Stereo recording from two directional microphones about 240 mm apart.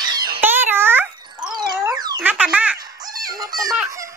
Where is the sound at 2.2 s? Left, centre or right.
Centre.